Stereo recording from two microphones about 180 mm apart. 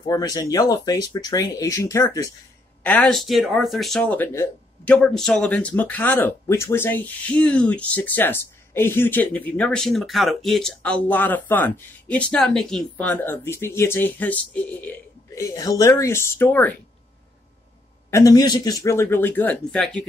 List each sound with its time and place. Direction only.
0.0 s speech: 20° left (ahead or behind)
18.1 s speech: 20° left (ahead or behind); by 20.1 s 5° left (ahead or behind)